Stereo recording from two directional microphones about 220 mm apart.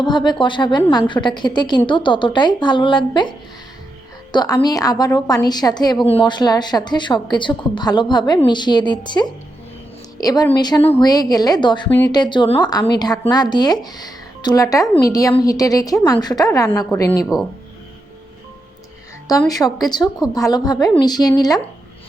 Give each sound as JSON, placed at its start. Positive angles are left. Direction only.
{"t": 0.0, "sound": "a woman's voice", "side_deg": 20}
{"t": 4.3, "sound": "a woman's voice", "side_deg": 15}
{"t": 11.9, "sound": "a woman's voice", "side_deg": 10}
{"t": 12.2, "sound": "a woman's voice", "side_deg": 20}
{"t": 19.3, "sound": "a woman's voice", "side_deg": 15}